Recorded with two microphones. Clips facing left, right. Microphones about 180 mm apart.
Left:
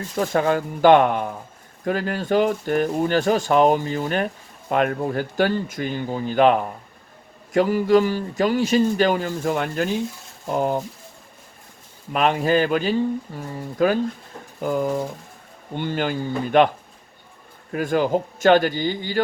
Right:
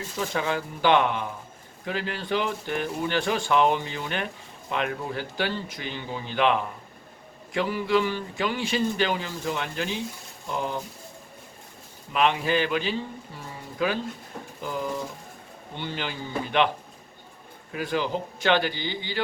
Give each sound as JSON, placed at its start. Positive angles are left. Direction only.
{"t": 0.2, "sound": "speech", "side_deg": 50}
{"t": 12.1, "sound": "speech", "side_deg": 45}
{"t": 17.7, "sound": "speech", "side_deg": 50}